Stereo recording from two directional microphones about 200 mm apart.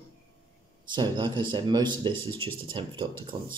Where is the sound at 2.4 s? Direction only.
25° right (ahead or behind).